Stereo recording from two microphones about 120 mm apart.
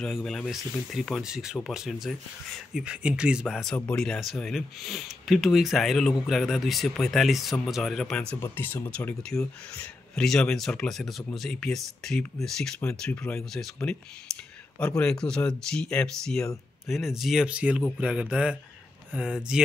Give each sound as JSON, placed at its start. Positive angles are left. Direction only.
{"t": 0.0, "sound": "speech", "side_deg": 5}
{"t": 8.4, "sound": "speech", "side_deg": 15}
{"t": 14.8, "sound": "speech", "side_deg": 10}